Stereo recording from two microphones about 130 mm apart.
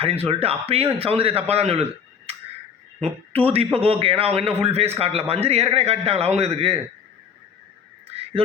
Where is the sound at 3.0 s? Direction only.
45° right (ahead or behind).